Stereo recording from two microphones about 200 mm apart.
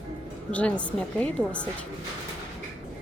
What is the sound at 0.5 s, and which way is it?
A woman's voice, 5° left (ahead or behind).